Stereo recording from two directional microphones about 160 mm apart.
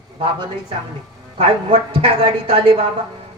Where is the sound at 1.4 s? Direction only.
35° right (ahead or behind).